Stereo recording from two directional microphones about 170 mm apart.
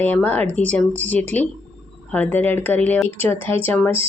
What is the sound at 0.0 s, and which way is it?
Speech, 10° left (ahead or behind).